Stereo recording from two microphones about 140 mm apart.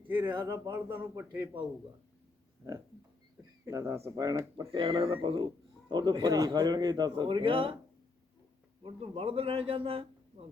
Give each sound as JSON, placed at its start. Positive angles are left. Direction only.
{"t": 0.1, "sound": "a sound", "side_deg": -15}
{"t": 0.6, "sound": "speech", "side_deg": -15}
{"t": 3.7, "sound": "speech", "side_deg": -20}
{"t": 4.7, "sound": "a man's voice", "side_deg": -40}
{"t": 8.8, "sound": "a man's voice", "side_deg": -40}